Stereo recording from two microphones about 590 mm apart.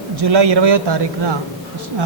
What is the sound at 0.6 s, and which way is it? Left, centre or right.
Speech, right.